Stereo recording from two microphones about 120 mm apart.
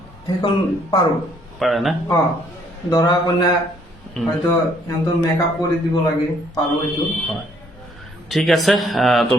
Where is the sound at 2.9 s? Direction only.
30° left (ahead or behind).